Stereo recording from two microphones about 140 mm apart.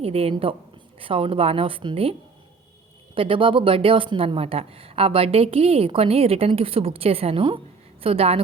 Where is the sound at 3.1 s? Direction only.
40° right (ahead or behind).